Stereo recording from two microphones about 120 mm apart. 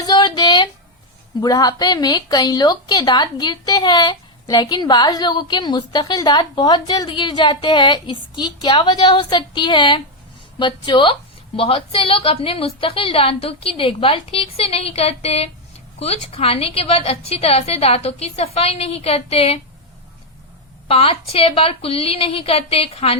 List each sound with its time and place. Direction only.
0.0 s a sound: 40° left (ahead or behind)
1.4 s a woman's voice: 30° left (ahead or behind); by 19.5 s 55° left (ahead or behind)
20.8 s a woman's voice: 50° left (ahead or behind)